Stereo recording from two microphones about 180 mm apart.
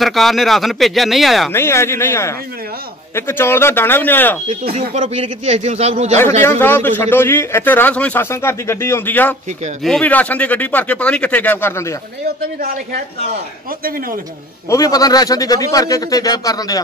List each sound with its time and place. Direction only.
0.0 s speech: centre (ahead or behind)
1.5 s a man's voice: 15° left (ahead or behind)
4.9 s a man's voice: 40° right (ahead or behind)
6.6 s a man's voice: 10° left (ahead or behind)
13.8 s a man's voice: 50° right (ahead or behind)
14.7 s a man's voice: 20° left (ahead or behind)